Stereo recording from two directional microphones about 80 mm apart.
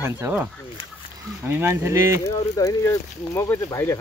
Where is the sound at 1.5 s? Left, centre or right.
Right.